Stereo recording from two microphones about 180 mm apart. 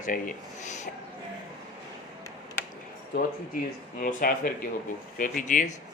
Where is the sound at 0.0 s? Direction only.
45° left (ahead or behind).